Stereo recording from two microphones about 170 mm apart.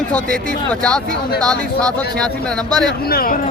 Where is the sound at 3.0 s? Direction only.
60° left (ahead or behind).